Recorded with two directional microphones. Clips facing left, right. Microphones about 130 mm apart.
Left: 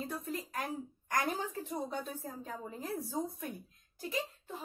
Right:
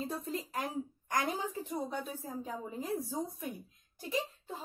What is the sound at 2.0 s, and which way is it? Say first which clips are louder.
A woman's voice: right 2 dB; 15° right (ahead or behind).